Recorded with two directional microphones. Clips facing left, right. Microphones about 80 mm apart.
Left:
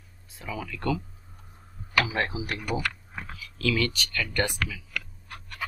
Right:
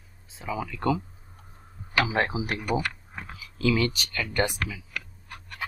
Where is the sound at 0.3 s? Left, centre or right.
Centre.